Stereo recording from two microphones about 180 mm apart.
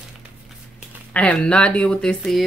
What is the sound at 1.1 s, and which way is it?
Speech, 5° left (ahead or behind).